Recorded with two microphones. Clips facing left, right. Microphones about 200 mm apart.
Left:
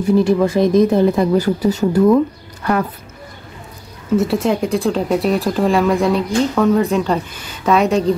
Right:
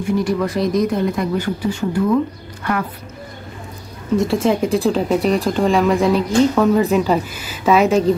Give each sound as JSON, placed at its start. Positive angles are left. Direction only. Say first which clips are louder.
{"t": 0.0, "sound": "speech", "louder": "left 5 dB", "side_deg": 30}
{"t": 4.2, "sound": "speech", "louder": "right 1 dB", "side_deg": 0}